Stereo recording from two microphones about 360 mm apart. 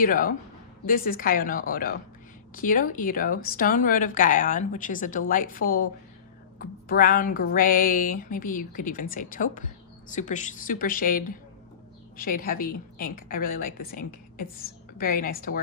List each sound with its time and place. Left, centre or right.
0.0 s speech: left